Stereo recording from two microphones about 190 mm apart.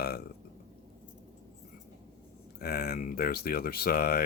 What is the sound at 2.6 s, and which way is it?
Speech, 55° left (ahead or behind).